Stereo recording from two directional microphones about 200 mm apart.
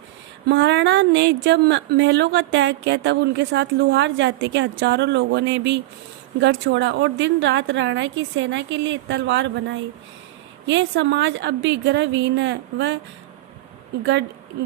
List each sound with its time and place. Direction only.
0.4 s speech: 60° right (ahead or behind)
14.0 s speech: 60° right (ahead or behind)